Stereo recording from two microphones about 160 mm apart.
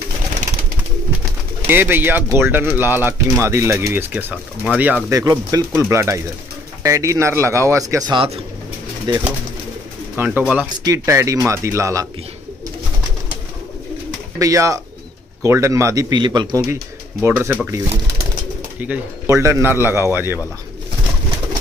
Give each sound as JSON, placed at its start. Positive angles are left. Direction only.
{"t": 1.7, "sound": "a man's voice", "side_deg": -15}
{"t": 5.1, "sound": "a man's voice", "side_deg": -20}
{"t": 10.1, "sound": "speech", "side_deg": -15}
{"t": 14.4, "sound": "speech", "side_deg": -20}
{"t": 17.2, "sound": "a man's voice", "side_deg": -15}
{"t": 18.8, "sound": "a man's voice", "side_deg": -15}